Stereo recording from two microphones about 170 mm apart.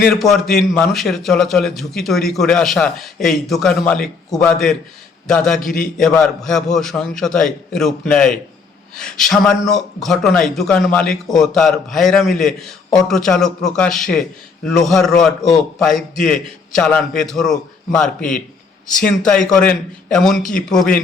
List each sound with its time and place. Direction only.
0.0 s a man's voice: centre (ahead or behind)
6.0 s a man's voice: 5° left (ahead or behind)